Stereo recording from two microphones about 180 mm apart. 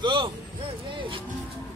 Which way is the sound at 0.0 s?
25° right (ahead or behind).